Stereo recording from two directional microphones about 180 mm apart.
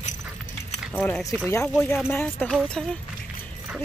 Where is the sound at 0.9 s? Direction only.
10° left (ahead or behind).